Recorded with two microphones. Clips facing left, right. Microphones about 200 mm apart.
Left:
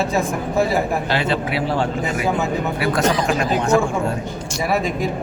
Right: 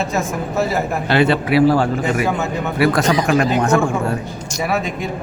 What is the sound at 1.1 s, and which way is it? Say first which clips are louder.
Speech: right 10 dB; 65° right (ahead or behind).